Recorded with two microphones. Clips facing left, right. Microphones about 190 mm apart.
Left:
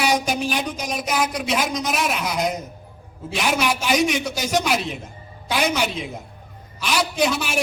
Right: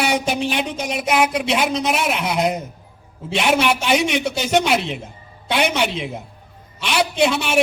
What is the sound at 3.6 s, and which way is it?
Speech, 65° right (ahead or behind).